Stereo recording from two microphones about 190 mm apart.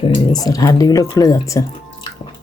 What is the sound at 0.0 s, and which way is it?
Speech, 25° left (ahead or behind).